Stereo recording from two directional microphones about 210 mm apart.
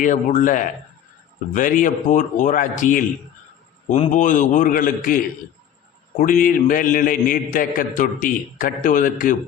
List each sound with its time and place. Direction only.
0.0 s a man's voice: 40° left (ahead or behind)